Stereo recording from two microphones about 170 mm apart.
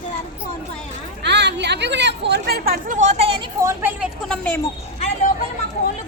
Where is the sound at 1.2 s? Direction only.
90° right; by 2.9 s 65° right (ahead or behind).